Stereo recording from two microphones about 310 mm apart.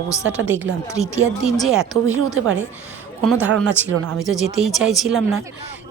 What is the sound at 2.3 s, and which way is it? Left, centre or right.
Speech, right.